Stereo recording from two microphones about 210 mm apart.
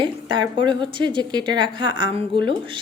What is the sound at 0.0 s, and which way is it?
A woman's voice, 25° right (ahead or behind).